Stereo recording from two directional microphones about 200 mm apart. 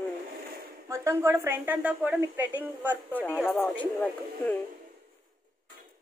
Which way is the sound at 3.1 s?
10° left (ahead or behind).